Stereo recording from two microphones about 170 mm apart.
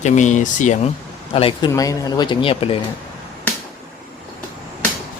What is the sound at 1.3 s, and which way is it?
Speech, 35° left (ahead or behind).